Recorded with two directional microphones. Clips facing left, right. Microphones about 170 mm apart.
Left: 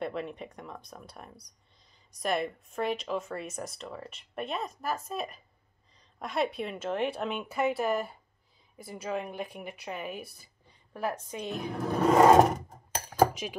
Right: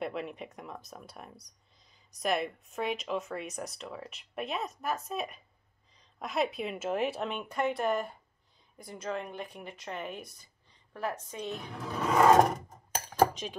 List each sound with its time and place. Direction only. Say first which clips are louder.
0.0 s speech: left 1 dB; centre (ahead or behind)
11.7 s a sound: left 7 dB; 50° left (ahead or behind)
12.4 s filing: left 3 dB; centre (ahead or behind)
13.2 s cutlery: left 1 dB; 10° left (ahead or behind)